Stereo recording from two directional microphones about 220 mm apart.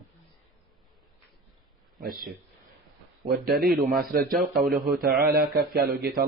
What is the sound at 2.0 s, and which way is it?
Speech, 40° right (ahead or behind).